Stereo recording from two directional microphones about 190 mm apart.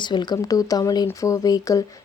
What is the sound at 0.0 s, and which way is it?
A woman's voice, 25° left (ahead or behind).